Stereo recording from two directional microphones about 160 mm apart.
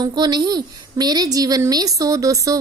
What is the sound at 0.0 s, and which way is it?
A woman's voice, 25° right (ahead or behind).